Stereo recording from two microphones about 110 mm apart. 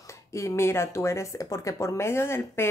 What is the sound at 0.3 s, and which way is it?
Speech, 25° left (ahead or behind).